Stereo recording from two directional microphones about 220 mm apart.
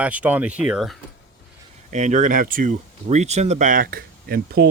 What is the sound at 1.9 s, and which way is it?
Speech, 30° right (ahead or behind).